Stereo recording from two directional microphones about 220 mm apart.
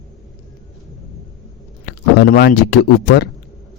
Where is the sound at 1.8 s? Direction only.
45° left (ahead or behind).